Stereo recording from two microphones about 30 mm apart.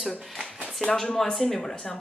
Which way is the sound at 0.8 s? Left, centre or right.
Centre.